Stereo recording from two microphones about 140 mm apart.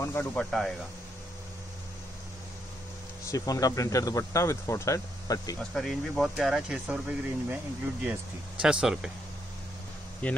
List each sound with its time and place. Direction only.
0.0 s speech: 15° left (ahead or behind)
3.3 s speech: 25° left (ahead or behind)
5.8 s speech: centre (ahead or behind)
10.2 s speech: 10° left (ahead or behind)